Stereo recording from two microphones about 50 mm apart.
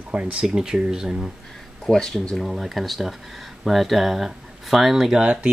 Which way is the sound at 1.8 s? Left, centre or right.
Centre.